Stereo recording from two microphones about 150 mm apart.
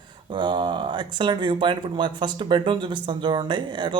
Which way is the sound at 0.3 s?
30° right (ahead or behind).